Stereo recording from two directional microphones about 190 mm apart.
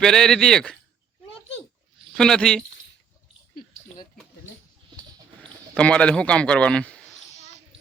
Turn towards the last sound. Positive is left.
turn(degrees=5)  # may be behind; listen again after turning